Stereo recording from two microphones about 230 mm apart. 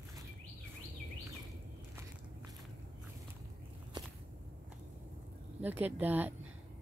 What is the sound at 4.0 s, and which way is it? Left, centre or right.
Walk, centre.